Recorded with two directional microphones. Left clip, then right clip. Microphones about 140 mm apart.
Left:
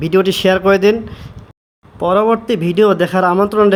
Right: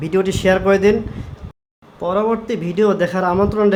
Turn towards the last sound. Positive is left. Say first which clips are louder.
# left 4 dB
turn(degrees=35)  # may be behind; listen again after turning